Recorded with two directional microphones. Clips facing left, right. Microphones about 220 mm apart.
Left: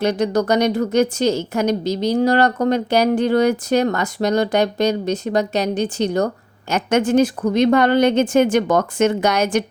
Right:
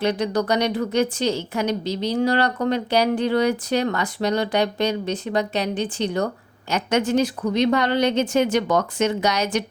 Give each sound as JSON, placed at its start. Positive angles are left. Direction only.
{"t": 0.0, "sound": "speech", "side_deg": 45}